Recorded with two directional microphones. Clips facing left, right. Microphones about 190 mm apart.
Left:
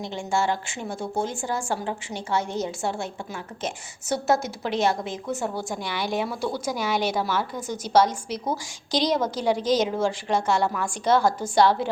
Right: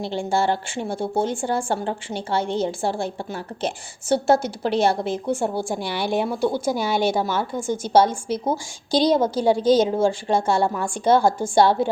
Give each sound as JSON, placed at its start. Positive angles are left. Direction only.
{"t": 0.0, "sound": "speech", "side_deg": -30}
{"t": 6.0, "sound": "speech", "side_deg": 0}
{"t": 6.5, "sound": "a woman's voice", "side_deg": -30}